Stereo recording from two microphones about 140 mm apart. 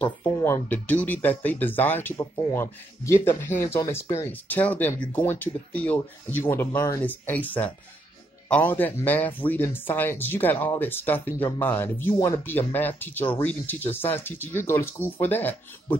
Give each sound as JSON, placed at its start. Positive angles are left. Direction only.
{"t": 0.0, "sound": "speech", "side_deg": 15}